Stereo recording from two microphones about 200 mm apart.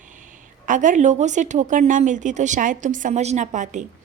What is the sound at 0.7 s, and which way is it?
A woman's voice, 40° right (ahead or behind).